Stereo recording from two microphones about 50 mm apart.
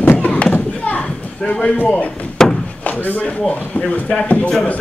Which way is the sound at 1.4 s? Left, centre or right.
Centre.